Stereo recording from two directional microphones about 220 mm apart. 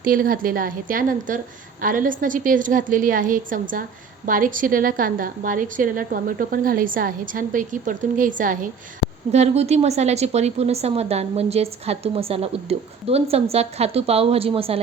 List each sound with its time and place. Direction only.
0.0 s a woman's voice: 40° right (ahead or behind)